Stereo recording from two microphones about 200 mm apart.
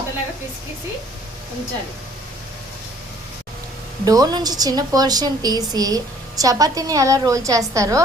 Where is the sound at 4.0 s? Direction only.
20° right (ahead or behind).